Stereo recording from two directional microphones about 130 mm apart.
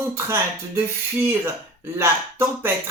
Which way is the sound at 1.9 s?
20° right (ahead or behind).